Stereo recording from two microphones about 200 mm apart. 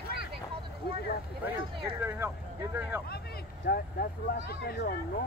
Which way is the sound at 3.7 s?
50° left (ahead or behind).